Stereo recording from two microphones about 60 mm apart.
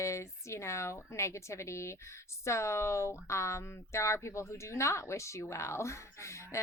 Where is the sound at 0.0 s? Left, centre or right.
Left.